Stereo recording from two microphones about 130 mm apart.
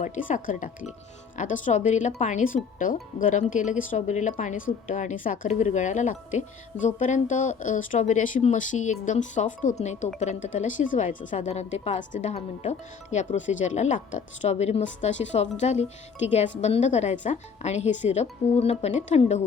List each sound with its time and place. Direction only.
0.0 s speech: 70° left (ahead or behind); by 0.7 s 85° left
1.4 s speech: 75° left (ahead or behind)